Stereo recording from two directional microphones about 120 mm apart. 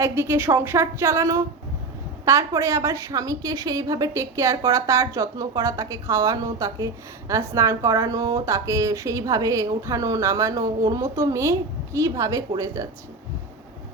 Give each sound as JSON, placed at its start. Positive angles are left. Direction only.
{"t": 0.0, "sound": "a woman's voice", "side_deg": -20}